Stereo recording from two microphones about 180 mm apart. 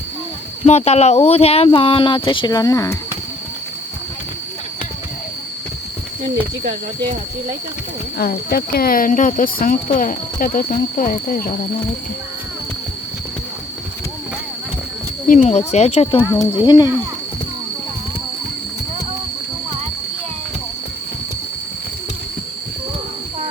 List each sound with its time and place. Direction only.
0.6 s speech: 35° left (ahead or behind); by 3.0 s 20° left (ahead or behind)
8.2 s speech: 60° left (ahead or behind)
15.3 s speech: 40° left (ahead or behind)
16.6 s speech: 25° left (ahead or behind)